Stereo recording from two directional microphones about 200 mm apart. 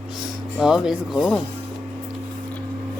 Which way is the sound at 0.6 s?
5° right (ahead or behind).